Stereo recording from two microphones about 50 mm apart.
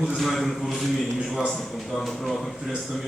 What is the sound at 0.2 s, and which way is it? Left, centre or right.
Speech, centre.